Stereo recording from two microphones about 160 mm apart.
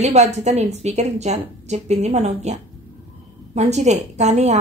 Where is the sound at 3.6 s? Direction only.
45° right (ahead or behind).